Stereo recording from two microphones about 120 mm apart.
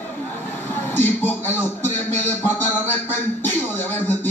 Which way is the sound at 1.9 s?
15° left (ahead or behind).